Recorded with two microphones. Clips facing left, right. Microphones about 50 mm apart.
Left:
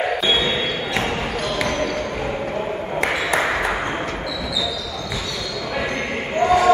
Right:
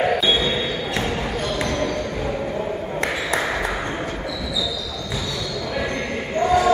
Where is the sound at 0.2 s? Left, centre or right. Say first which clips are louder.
Even; left.